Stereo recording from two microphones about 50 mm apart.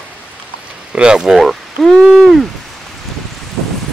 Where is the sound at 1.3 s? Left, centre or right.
Centre.